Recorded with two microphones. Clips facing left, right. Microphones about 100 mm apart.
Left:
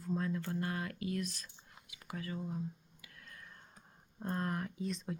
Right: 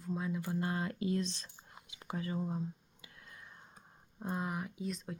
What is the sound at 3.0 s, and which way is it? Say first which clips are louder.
Whispering: even; 20° right (ahead or behind).